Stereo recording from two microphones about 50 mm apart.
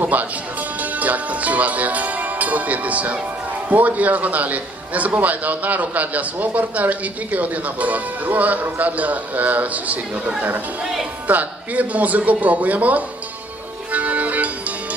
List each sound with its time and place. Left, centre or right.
0.0 s a man's voice: right
13.9 s music: right